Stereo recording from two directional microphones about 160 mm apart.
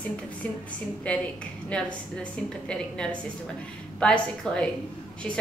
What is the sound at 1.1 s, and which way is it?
A woman's voice, 5° left (ahead or behind).